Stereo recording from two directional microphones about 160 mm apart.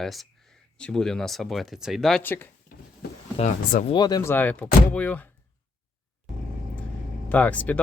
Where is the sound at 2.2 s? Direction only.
15° left (ahead or behind).